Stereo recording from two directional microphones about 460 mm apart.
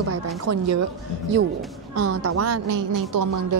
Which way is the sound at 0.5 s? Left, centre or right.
Right.